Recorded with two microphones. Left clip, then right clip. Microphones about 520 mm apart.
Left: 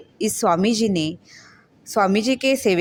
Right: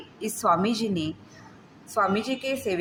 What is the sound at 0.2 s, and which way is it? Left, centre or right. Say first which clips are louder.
A woman's voice: left 4 dB; left.